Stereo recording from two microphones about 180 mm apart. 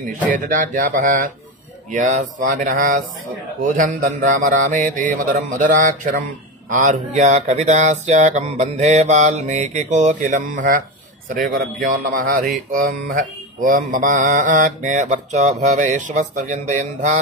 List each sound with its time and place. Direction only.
0.3 s speech: 50° right (ahead or behind)
4.2 s speech: 45° right (ahead or behind)